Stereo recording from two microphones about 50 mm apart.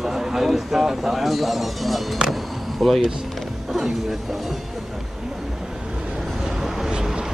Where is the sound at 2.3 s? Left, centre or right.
Centre.